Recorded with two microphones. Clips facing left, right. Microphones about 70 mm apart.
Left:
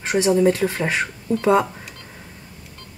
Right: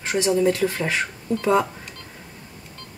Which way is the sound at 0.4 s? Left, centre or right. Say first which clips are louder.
Left 1 dB; left.